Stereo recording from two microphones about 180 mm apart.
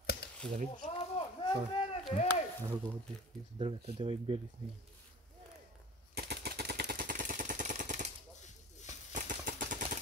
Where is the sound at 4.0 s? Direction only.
30° right (ahead or behind).